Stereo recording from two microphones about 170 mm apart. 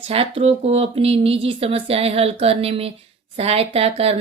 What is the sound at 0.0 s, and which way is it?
Speech, 35° right (ahead or behind).